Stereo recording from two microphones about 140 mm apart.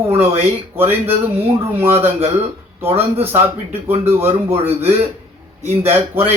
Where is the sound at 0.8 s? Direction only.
15° right (ahead or behind).